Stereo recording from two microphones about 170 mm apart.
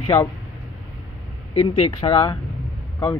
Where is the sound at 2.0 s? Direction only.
25° left (ahead or behind).